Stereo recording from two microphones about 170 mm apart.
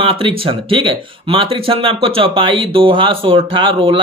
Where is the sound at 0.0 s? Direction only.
30° right (ahead or behind).